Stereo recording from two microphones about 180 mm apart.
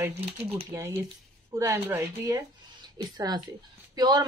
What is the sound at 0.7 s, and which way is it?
A woman's voice, 15° right (ahead or behind).